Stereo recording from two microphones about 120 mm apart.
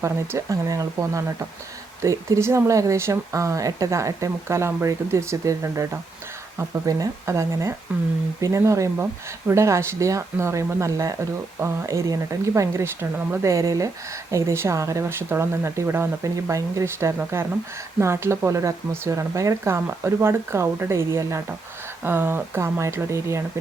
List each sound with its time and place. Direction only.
0.0 s speech: 25° right (ahead or behind)
7.9 s speech: 15° right (ahead or behind)
8.4 s speech: 25° right (ahead or behind)